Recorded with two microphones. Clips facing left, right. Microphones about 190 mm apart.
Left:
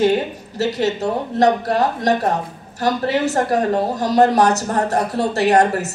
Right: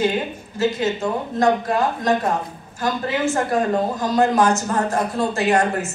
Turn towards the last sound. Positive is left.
turn(degrees=40)  # may be behind; listen again after turning